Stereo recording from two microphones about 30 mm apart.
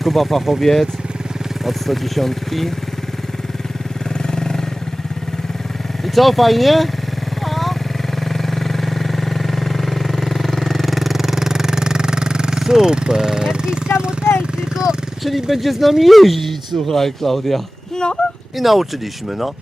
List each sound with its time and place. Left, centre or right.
0.0 s speech: centre
4.3 s vehicle: left
6.1 s speech: centre
7.4 s vehicle: centre; by 12.6 s right
12.8 s speech: right
15.4 s speech: centre
17.9 s speech: left
18.5 s speech: centre